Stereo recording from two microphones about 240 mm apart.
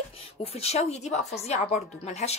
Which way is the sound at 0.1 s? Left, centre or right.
Left.